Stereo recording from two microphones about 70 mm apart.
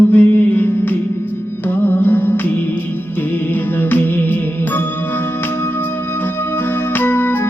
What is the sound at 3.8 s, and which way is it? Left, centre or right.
Music, left.